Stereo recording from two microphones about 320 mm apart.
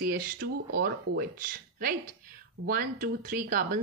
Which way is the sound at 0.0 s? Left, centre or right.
Right.